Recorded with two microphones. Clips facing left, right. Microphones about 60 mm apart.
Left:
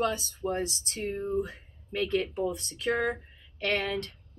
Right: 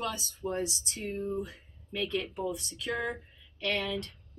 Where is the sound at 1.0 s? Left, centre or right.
Left.